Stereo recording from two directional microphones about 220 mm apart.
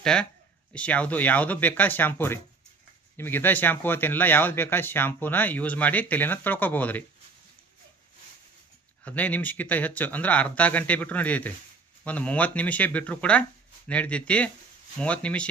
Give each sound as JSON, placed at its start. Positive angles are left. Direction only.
{"t": 0.0, "sound": "speech", "side_deg": 5}
{"t": 9.0, "sound": "speech", "side_deg": 5}